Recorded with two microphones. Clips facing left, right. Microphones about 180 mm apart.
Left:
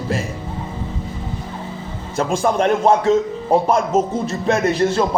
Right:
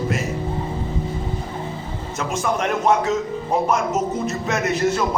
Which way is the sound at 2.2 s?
30° left (ahead or behind).